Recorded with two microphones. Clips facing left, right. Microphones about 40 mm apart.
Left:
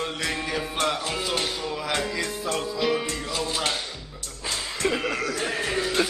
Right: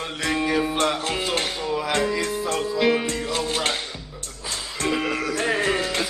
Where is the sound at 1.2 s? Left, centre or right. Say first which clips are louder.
Right 2 dB; right.